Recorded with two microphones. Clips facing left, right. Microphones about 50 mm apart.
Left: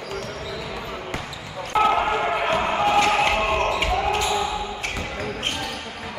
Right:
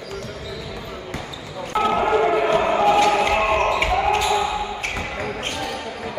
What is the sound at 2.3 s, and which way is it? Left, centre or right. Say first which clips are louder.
Basketball bounce: right 4 dB; left.